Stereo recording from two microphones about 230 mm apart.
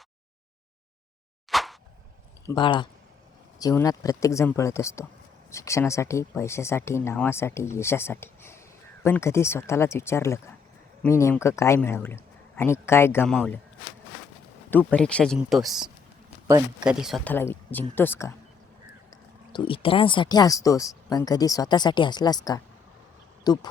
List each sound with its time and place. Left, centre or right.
1.5 s a sound: centre
2.6 s speech: left; by 13.6 s centre
14.7 s speech: centre
19.5 s speech: left